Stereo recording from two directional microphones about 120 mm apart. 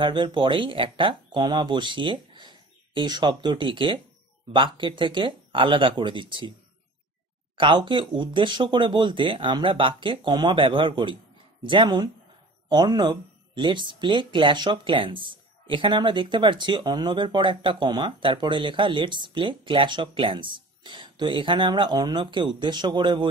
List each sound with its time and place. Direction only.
0.0 s speech: 40° right (ahead or behind)
7.5 s speech: 45° right (ahead or behind)